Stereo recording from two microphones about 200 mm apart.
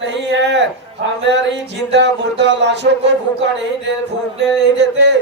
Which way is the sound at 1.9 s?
60° right (ahead or behind).